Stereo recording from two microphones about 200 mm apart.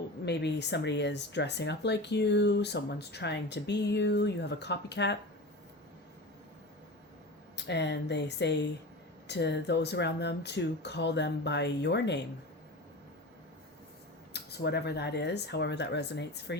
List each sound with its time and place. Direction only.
0.3 s speech: 60° left (ahead or behind)
7.5 s speech: 60° left (ahead or behind)
14.3 s speech: 55° left (ahead or behind)